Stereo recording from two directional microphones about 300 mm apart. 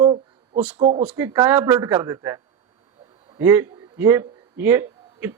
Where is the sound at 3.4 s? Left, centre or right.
Centre.